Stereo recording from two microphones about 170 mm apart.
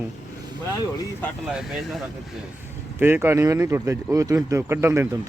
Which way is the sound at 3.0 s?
15° right (ahead or behind).